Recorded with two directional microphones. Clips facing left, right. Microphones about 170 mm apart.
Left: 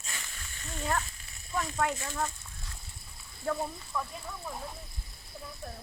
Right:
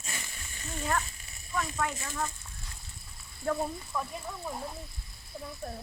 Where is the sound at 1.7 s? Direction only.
20° left (ahead or behind).